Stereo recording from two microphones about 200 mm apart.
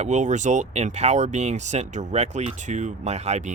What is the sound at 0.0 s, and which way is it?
Speech, 35° right (ahead or behind).